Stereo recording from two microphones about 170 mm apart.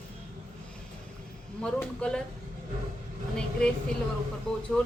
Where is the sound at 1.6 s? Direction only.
5° left (ahead or behind).